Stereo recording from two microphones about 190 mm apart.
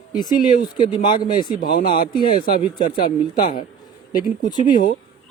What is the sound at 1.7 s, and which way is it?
Speech, 25° left (ahead or behind).